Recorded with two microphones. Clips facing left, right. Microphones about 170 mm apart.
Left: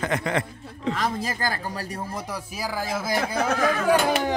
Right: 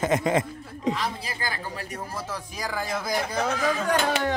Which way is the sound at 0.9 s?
45° left (ahead or behind).